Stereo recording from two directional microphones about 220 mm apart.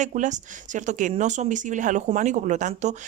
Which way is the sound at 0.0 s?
35° right (ahead or behind).